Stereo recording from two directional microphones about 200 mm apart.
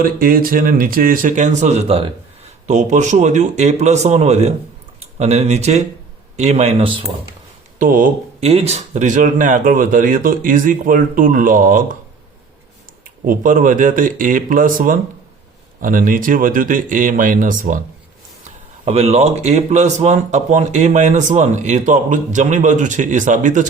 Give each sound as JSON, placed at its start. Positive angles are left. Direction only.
{"t": 0.0, "sound": "speech", "side_deg": -45}
{"t": 7.8, "sound": "speech", "side_deg": -45}
{"t": 13.2, "sound": "speech", "side_deg": -45}
{"t": 18.9, "sound": "speech", "side_deg": -30}